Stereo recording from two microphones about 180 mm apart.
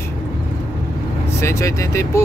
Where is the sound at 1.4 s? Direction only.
15° left (ahead or behind).